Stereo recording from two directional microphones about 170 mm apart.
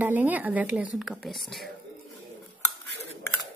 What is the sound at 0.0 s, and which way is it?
A woman's voice, 10° right (ahead or behind).